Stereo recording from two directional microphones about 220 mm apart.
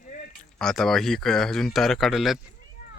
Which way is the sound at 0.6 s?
Centre (ahead or behind).